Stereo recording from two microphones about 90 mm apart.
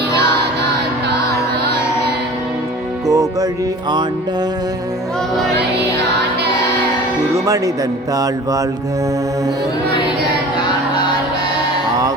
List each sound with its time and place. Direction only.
3.1 s music: 40° right (ahead or behind)
7.4 s mantra: 40° right (ahead or behind)